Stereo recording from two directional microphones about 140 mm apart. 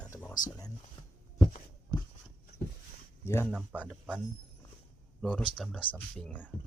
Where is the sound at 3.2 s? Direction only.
15° left (ahead or behind).